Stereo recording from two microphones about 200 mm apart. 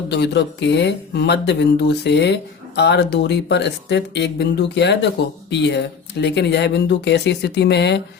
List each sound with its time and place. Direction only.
0.1 s speech: 60° left (ahead or behind)